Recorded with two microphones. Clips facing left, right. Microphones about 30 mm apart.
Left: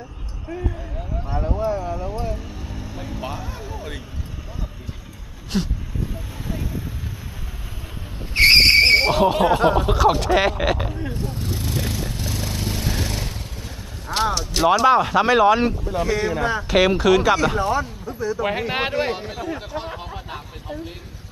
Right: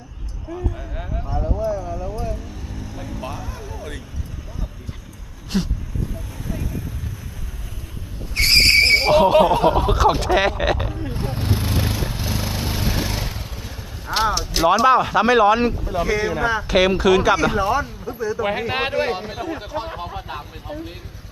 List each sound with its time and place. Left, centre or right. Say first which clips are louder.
0.4 s a sound: even; centre
1.2 s vehicle: even; centre
5.5 s a sound: right 1 dB; centre
6.1 s a sound: even; centre
8.2 s vehicle: left 3 dB; left
8.6 s vehicle: even; centre
9.1 s speech: right 3 dB; centre
11.1 s vehicle: right 3 dB; right; by 13.3 s centre
14.1 s speech: right 1 dB; centre